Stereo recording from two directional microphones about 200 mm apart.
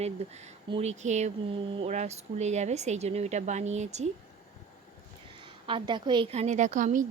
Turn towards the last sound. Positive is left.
turn(degrees=-40)  # may be behind; listen again after turning